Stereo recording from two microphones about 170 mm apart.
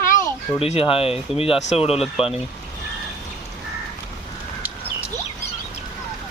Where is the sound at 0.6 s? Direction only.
35° left (ahead or behind).